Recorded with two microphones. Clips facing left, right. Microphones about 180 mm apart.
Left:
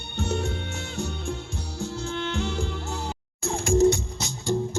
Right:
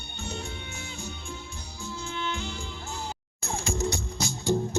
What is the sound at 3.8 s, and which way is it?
Music, 20° left (ahead or behind).